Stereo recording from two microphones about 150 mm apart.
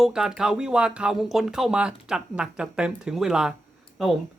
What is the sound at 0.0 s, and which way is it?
Speech, 5° right (ahead or behind).